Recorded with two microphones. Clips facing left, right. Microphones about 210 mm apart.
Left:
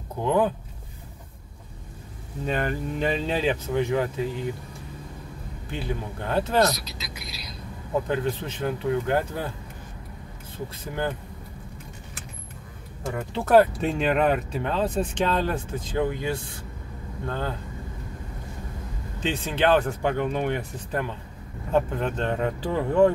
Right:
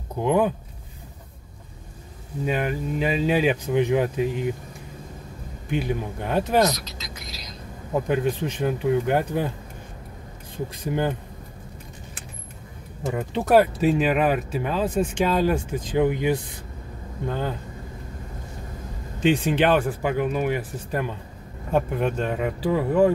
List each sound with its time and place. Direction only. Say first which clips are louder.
0.2 s speech: right 2 dB; 15° right (ahead or behind)
2.4 s speech: right 2 dB; 10° right (ahead or behind)
5.7 s speech: right 5 dB; 15° right (ahead or behind)
6.7 s vehicle: right 1 dB; 10° left (ahead or behind)
8.1 s speech: right 3 dB; 15° right (ahead or behind)
10.8 s speech: right 4 dB; 15° right (ahead or behind)
13.1 s speech: even; 15° right (ahead or behind)
19.1 s speech: right 8 dB; 15° right (ahead or behind)